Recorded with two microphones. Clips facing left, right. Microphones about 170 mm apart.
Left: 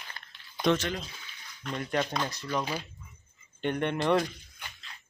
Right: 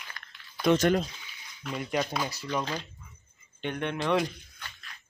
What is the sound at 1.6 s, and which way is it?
Speech, 5° right (ahead or behind).